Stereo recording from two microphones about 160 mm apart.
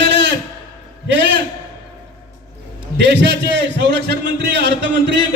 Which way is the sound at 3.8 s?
90° right.